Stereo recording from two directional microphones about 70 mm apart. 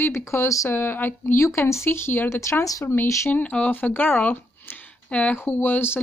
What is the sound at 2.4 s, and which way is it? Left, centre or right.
Speech, left.